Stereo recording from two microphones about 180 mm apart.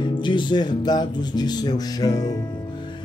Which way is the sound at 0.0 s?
25° left (ahead or behind).